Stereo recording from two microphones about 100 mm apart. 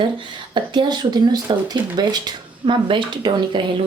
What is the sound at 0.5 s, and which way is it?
Speech, 50° right (ahead or behind).